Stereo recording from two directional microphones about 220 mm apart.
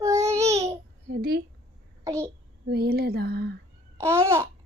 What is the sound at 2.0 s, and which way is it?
Speech, 15° right (ahead or behind).